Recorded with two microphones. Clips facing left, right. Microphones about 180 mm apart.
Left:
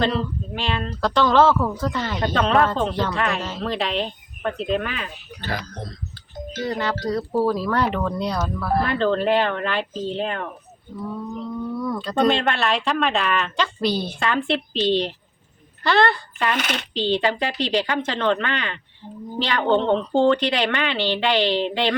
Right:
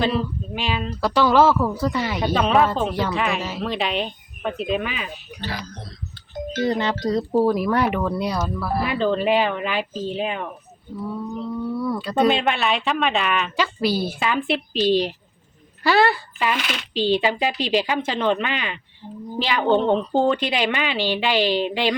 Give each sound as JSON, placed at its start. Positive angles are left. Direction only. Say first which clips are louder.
{"t": 0.0, "sound": "speech", "louder": "even", "side_deg": -5}
{"t": 5.4, "sound": "speech", "louder": "left 3 dB", "side_deg": 50}
{"t": 6.7, "sound": "speech", "louder": "right 1 dB", "side_deg": -20}
{"t": 11.8, "sound": "speech", "louder": "right 1 dB", "side_deg": -10}